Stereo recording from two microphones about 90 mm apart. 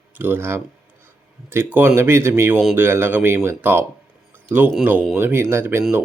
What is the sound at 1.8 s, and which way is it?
Speech, 25° right (ahead or behind).